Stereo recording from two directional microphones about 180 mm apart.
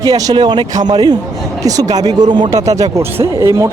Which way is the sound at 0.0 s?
20° right (ahead or behind).